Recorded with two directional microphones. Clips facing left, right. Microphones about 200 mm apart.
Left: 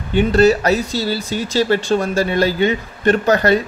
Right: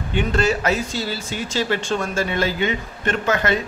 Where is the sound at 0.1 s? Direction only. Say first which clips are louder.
Left 8 dB; 35° left (ahead or behind).